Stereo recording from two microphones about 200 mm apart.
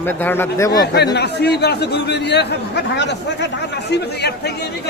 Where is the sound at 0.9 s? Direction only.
55° left (ahead or behind).